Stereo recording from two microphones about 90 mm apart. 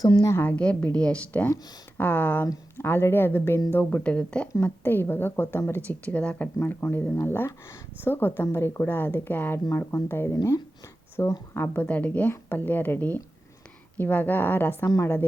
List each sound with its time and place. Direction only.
0.2 s speech: 30° left (ahead or behind)
0.4 s a woman's voice: 15° left (ahead or behind)
14.8 s speech: 40° left (ahead or behind)